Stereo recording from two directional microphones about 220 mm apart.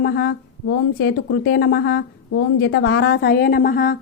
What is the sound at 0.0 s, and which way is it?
Speech, 45° left (ahead or behind).